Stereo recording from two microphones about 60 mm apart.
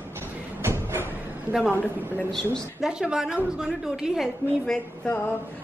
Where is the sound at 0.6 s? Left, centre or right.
Right.